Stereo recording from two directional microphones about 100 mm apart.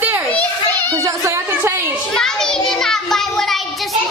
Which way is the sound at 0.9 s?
30° right (ahead or behind).